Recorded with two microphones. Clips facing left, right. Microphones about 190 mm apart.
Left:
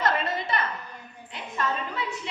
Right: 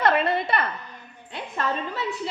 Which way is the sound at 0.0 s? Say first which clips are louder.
Right 5 dB; 60° right (ahead or behind).